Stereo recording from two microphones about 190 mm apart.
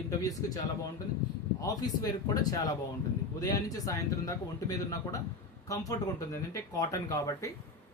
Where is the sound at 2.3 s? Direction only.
20° left (ahead or behind).